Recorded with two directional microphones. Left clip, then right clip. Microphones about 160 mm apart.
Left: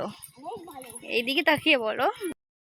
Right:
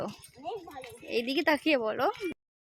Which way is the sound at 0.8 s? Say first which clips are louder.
Left 5 dB; centre (ahead or behind).